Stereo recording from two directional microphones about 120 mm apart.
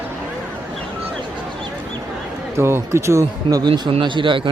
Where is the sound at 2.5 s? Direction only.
20° right (ahead or behind).